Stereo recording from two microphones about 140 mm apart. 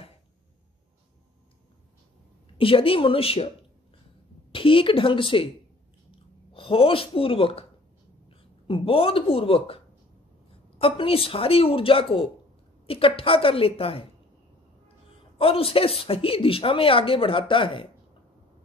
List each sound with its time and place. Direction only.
2.5 s a woman's voice: 40° left (ahead or behind)
4.5 s a woman's voice: 40° left (ahead or behind)
6.5 s a woman's voice: 40° left (ahead or behind)
10.8 s a woman's voice: 40° left (ahead or behind)
15.3 s a woman's voice: 40° left (ahead or behind)